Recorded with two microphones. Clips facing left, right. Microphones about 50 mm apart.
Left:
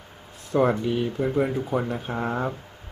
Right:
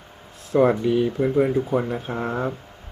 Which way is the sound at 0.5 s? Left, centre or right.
Centre.